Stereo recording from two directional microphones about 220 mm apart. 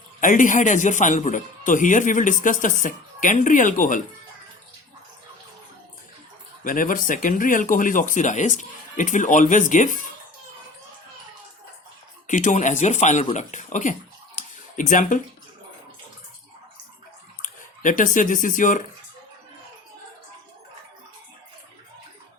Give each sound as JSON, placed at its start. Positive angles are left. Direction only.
{"t": 0.2, "sound": "speech", "side_deg": 35}
{"t": 6.7, "sound": "speech", "side_deg": 40}
{"t": 12.3, "sound": "speech", "side_deg": 35}
{"t": 14.3, "sound": "a sound", "side_deg": 35}
{"t": 17.4, "sound": "speech", "side_deg": 35}